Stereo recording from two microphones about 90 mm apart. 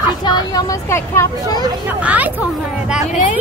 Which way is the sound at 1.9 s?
15° right (ahead or behind).